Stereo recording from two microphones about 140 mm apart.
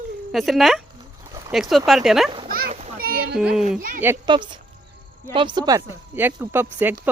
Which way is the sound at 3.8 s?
85° right.